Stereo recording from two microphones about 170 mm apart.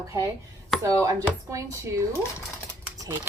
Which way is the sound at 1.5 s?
15° right (ahead or behind).